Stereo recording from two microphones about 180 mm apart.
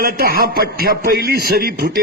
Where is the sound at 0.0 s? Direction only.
60° right (ahead or behind).